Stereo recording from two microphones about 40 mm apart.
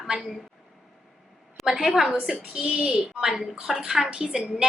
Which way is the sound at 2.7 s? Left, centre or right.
Centre.